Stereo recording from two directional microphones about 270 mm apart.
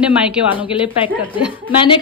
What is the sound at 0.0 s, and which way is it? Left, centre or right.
Speech, centre.